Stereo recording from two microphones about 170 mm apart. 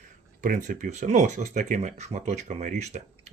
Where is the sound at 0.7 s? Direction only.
45° right (ahead or behind).